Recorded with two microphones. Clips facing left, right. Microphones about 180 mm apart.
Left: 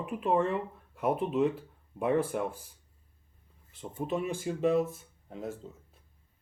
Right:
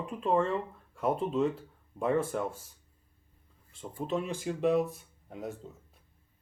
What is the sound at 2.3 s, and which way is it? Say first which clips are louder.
Speech: left 1 dB; 15° left (ahead or behind).